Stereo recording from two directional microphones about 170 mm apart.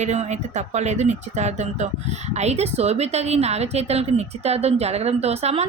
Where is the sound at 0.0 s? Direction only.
40° right (ahead or behind).